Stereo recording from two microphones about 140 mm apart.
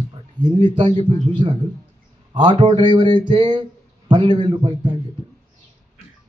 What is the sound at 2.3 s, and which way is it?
A man's voice, 35° right (ahead or behind).